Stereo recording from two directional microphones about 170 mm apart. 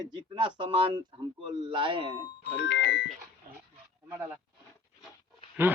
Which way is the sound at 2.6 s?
90° left.